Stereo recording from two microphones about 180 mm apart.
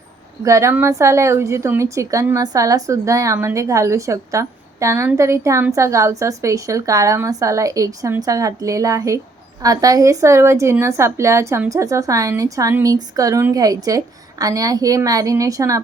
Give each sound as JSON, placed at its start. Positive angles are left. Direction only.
{"t": 0.4, "sound": "a woman's voice", "side_deg": -15}